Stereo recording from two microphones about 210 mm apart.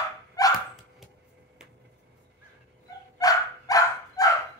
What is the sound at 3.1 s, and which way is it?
Dog, 15° left (ahead or behind).